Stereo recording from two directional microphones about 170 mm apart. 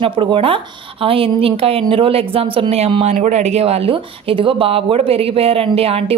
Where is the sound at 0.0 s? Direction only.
30° right (ahead or behind).